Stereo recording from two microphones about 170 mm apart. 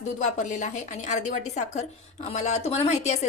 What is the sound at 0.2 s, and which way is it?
A woman's voice, 45° left (ahead or behind).